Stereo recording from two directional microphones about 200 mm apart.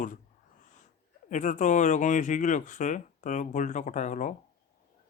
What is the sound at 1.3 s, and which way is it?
Speech, 35° left (ahead or behind).